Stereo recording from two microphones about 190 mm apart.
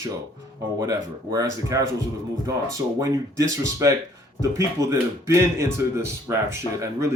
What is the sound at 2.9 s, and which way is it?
Speech, 15° right (ahead or behind).